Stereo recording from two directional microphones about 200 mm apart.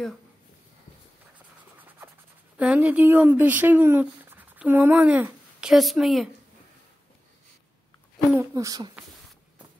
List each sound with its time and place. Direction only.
2.5 s speech: 5° right (ahead or behind)
8.4 s speech: 15° right (ahead or behind)